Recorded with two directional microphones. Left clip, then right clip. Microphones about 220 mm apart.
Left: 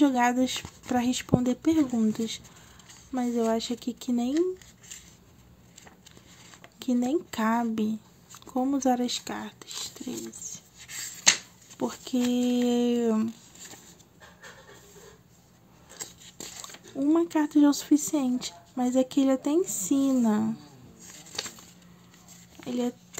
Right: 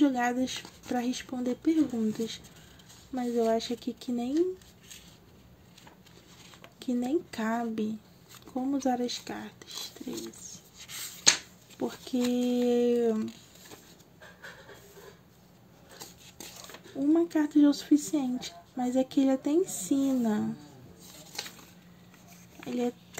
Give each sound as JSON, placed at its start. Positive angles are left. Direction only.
{"t": 0.0, "sound": "speech", "side_deg": 15}
{"t": 6.8, "sound": "speech", "side_deg": 15}
{"t": 16.7, "sound": "speech", "side_deg": 15}
{"t": 22.6, "sound": "speech", "side_deg": 10}